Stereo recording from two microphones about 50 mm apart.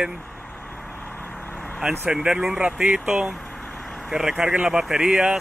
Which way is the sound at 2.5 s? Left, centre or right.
Right.